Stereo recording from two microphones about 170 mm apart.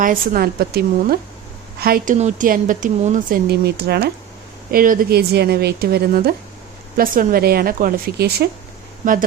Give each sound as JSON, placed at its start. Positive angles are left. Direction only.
{"t": 0.0, "sound": "speech", "side_deg": -60}
{"t": 2.1, "sound": "speech", "side_deg": -45}
{"t": 4.7, "sound": "a woman's voice", "side_deg": -55}
{"t": 6.9, "sound": "speech", "side_deg": -55}